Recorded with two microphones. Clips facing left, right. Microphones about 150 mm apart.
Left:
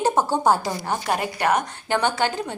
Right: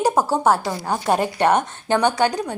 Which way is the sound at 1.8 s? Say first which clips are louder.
Right 4 dB; 15° right (ahead or behind).